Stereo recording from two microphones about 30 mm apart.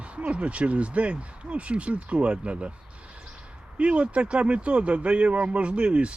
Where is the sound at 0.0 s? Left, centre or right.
Right.